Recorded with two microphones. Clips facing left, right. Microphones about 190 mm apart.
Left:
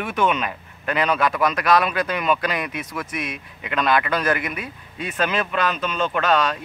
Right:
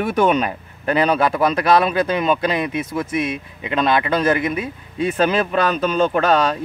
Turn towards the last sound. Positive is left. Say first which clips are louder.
# right 4 dB
turn(degrees=-35)  # may be behind; listen again after turning